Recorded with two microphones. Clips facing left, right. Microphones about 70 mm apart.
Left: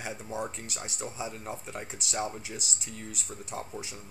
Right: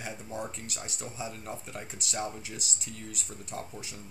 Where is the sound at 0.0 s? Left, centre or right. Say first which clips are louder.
Left 2 dB; centre.